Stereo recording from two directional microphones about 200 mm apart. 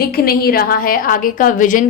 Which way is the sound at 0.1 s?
50° left (ahead or behind).